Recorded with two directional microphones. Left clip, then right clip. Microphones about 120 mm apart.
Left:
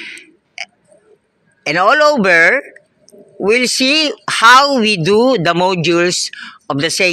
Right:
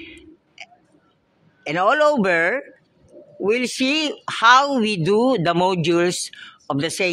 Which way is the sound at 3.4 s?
30° left (ahead or behind).